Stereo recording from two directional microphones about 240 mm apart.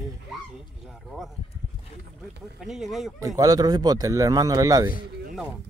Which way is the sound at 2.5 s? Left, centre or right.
Centre.